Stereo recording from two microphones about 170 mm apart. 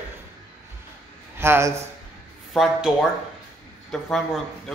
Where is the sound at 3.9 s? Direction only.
Centre (ahead or behind).